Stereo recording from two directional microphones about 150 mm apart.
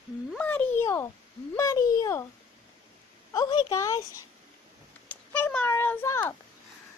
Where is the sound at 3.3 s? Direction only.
25° left (ahead or behind).